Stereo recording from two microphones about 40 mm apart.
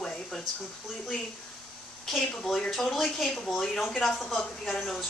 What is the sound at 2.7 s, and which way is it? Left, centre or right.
Speech, centre.